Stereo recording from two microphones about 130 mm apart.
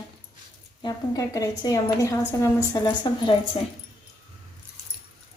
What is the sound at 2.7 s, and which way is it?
Speech, 35° left (ahead or behind).